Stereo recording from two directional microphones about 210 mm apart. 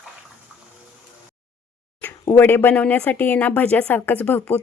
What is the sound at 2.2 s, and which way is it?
Speech, 15° left (ahead or behind).